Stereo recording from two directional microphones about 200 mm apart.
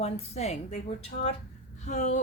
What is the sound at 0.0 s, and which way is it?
Speech, 30° left (ahead or behind).